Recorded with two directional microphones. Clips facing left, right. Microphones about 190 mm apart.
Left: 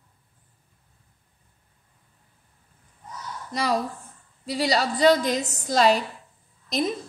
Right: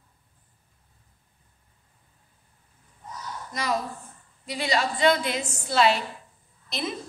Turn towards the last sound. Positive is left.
turn(degrees=40)  # may be behind; listen again after turning